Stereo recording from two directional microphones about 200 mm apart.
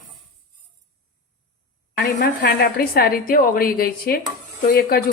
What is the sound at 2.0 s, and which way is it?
A woman's voice, 50° left (ahead or behind).